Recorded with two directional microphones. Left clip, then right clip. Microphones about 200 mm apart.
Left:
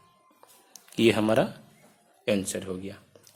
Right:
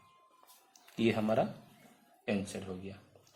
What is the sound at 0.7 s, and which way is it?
A man's voice, 45° left (ahead or behind).